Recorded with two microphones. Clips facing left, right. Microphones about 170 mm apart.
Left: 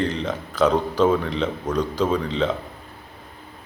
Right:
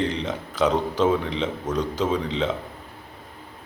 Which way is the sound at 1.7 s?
20° right (ahead or behind).